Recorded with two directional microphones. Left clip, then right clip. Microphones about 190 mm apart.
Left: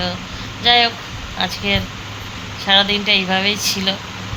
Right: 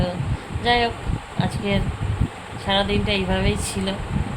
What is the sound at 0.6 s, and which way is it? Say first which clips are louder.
Speech: left 6 dB; 15° right (ahead or behind).